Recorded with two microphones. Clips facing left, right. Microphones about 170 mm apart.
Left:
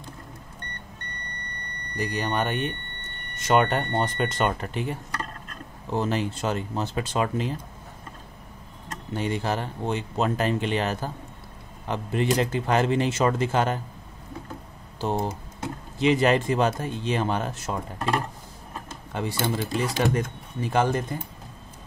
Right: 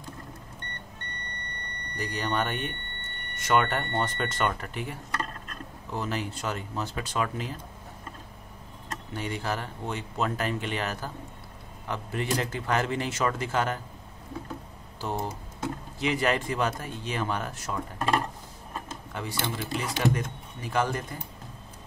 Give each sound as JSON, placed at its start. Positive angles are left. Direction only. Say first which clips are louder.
{"t": 2.0, "sound": "speech", "louder": "left 3 dB", "side_deg": 15}
{"t": 9.1, "sound": "speech", "louder": "left 5 dB", "side_deg": 25}
{"t": 15.0, "sound": "speech", "louder": "left 5 dB", "side_deg": 20}
{"t": 19.4, "sound": "speech", "louder": "left 6 dB", "side_deg": 40}
{"t": 20.2, "sound": "speech", "louder": "left 6 dB", "side_deg": 25}